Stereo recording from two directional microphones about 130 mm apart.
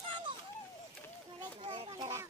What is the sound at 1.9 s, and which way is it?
Speech, 25° right (ahead or behind).